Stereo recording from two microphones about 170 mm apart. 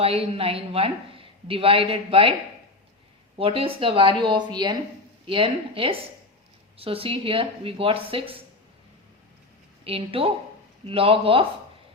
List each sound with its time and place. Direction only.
0.0 s speech: 35° right (ahead or behind)
3.3 s speech: 35° right (ahead or behind)
9.8 s speech: 35° right (ahead or behind)